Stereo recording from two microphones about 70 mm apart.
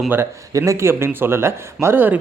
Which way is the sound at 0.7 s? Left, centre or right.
Right.